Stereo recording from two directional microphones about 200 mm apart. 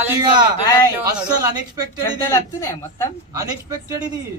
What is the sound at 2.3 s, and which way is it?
Speech, 15° left (ahead or behind).